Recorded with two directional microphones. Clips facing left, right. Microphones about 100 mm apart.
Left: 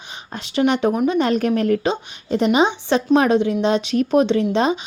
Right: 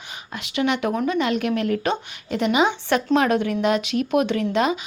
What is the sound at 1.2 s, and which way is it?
Speech, 40° left (ahead or behind).